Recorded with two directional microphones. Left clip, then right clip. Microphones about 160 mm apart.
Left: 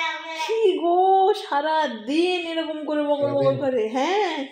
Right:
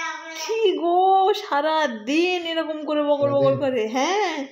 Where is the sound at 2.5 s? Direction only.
25° right (ahead or behind).